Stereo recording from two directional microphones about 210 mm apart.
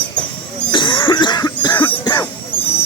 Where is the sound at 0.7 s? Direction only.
20° left (ahead or behind).